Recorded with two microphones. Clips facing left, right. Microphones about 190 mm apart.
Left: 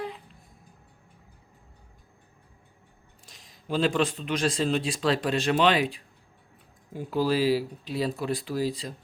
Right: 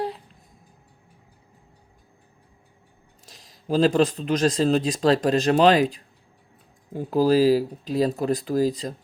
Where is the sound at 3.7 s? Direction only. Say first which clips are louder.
Right 6 dB; 40° right (ahead or behind).